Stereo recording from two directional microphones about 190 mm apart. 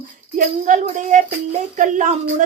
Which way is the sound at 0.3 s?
40° right (ahead or behind).